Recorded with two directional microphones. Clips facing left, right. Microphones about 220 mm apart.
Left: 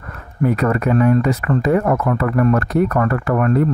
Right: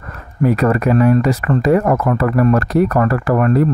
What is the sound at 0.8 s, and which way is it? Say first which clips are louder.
Speech: right 1 dB; 85° right.